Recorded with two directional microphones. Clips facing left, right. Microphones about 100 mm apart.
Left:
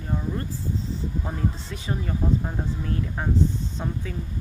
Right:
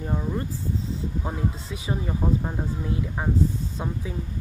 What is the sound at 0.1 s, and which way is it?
Speech, 15° right (ahead or behind).